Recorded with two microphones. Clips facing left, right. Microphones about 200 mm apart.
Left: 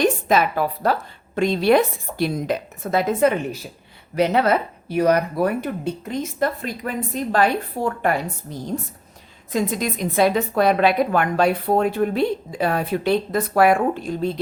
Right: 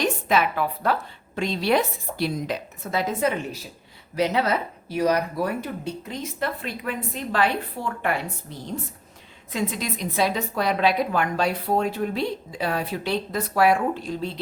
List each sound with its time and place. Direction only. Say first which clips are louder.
0.0 s a woman's voice: left 4 dB; 40° left (ahead or behind)
1.4 s a woman's voice: left 6 dB; 50° left (ahead or behind)